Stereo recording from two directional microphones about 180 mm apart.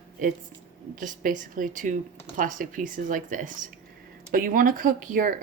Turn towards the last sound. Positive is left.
turn(degrees=-50)  # may be behind; listen again after turning